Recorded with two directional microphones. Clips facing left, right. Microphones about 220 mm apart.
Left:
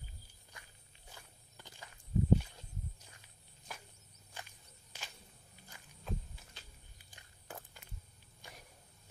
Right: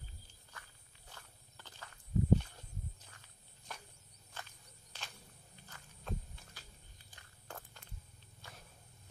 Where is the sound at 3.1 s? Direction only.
5° left (ahead or behind).